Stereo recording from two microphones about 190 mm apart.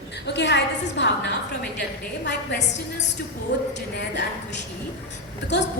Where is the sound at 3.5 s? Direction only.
65° left (ahead or behind).